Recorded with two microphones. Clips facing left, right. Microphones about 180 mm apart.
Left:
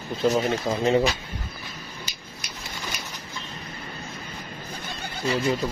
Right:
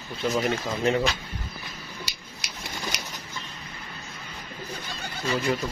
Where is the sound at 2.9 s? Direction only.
80° right.